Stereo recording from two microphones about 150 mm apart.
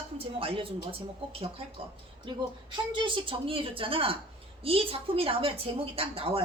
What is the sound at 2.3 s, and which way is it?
A woman's voice, 35° right (ahead or behind).